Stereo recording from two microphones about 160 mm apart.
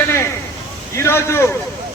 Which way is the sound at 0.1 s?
15° left (ahead or behind).